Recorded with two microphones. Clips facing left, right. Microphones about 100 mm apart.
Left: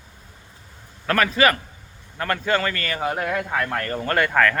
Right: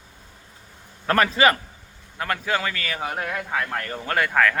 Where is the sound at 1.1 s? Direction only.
25° right (ahead or behind).